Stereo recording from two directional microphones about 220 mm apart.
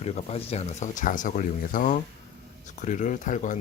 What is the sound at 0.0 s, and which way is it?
Speech, 30° left (ahead or behind).